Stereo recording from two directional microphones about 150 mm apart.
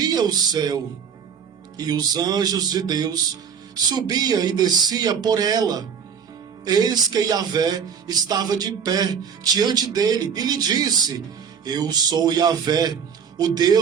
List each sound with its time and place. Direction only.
0.0 s music: 25° right (ahead or behind)
1.8 s speech: 25° right (ahead or behind)